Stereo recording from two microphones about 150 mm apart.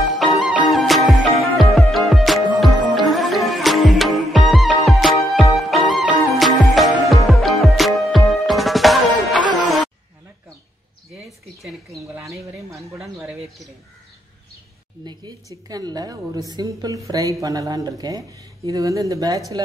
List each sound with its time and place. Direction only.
0.2 s music: centre (ahead or behind)
11.2 s a sound: centre (ahead or behind)
15.7 s a woman's voice: 25° right (ahead or behind)